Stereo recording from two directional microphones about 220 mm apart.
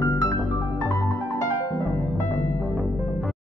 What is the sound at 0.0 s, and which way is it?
Music, 15° left (ahead or behind).